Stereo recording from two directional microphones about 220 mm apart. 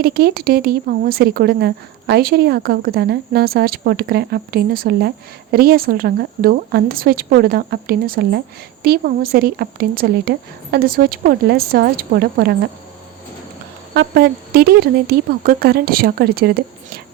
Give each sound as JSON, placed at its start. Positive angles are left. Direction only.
{"t": 0.0, "sound": "speech", "side_deg": -45}
{"t": 13.9, "sound": "speech", "side_deg": -50}